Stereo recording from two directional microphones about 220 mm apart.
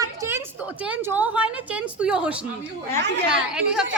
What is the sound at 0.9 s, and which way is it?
A woman's voice, 5° right (ahead or behind).